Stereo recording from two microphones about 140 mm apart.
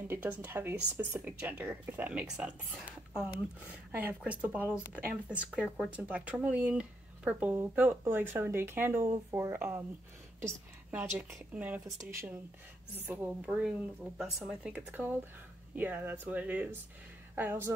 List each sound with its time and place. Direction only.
0.1 s speech: 10° right (ahead or behind)